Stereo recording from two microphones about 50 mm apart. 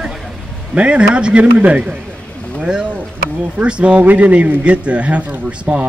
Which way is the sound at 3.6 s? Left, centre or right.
Right.